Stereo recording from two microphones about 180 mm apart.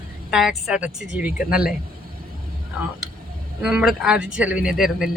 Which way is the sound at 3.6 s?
5° right (ahead or behind).